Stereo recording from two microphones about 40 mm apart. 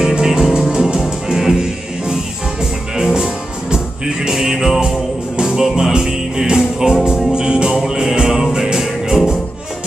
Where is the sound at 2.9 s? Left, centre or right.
Centre.